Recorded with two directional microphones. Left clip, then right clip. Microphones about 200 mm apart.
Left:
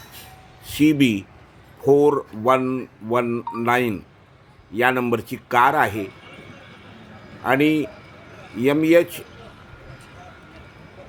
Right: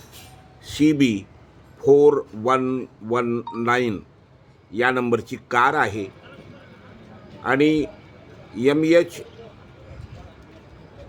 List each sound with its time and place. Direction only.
0.6 s speech: 15° left (ahead or behind)
7.4 s speech: 15° left (ahead or behind)